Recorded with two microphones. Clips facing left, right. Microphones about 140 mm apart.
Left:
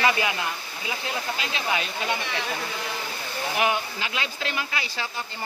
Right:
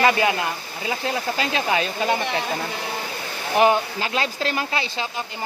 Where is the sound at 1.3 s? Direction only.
40° right (ahead or behind).